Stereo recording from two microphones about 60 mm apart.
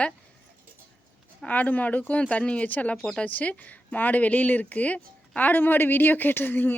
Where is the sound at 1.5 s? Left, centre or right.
Left.